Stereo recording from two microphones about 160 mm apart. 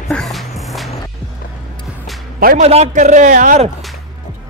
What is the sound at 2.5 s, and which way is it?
A man's voice, 45° right (ahead or behind).